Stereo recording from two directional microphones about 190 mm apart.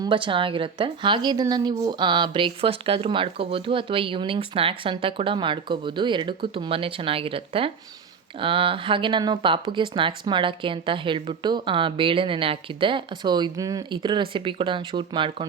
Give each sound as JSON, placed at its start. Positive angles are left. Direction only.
{"t": 0.0, "sound": "speech", "side_deg": -25}